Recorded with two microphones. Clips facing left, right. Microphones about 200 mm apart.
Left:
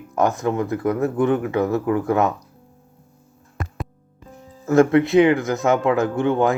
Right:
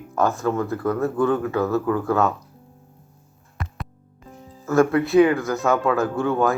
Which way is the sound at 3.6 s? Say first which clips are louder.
Left 3 dB; 50° left (ahead or behind).